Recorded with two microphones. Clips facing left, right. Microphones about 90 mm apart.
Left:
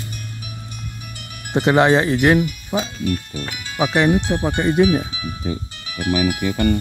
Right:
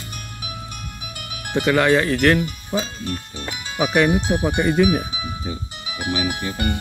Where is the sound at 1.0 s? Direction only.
60° right (ahead or behind).